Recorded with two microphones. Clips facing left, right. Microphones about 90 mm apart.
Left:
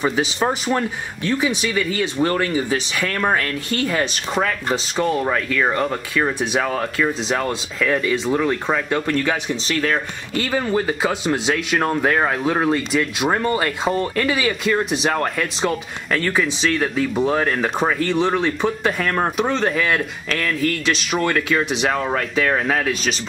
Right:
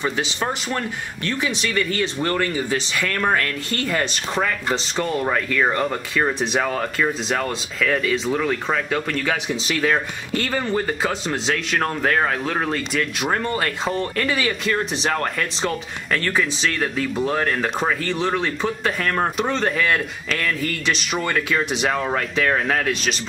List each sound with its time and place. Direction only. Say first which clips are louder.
0.0 s speech: left 4 dB; 10° left (ahead or behind)